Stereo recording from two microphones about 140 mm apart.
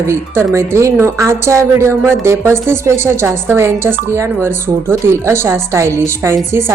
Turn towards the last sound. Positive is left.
turn(degrees=-20)  # may be behind; listen again after turning